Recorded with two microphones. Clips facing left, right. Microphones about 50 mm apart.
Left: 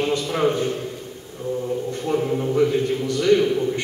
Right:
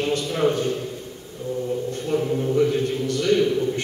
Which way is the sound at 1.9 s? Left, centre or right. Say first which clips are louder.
Left 2 dB; left.